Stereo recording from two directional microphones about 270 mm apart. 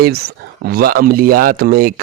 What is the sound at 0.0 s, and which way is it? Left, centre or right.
Speech, right.